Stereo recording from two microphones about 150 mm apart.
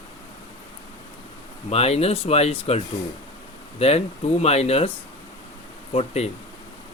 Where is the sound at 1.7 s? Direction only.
45° left (ahead or behind).